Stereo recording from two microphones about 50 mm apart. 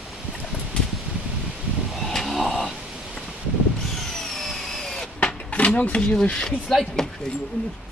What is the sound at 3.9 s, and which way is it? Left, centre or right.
Vehicle, centre.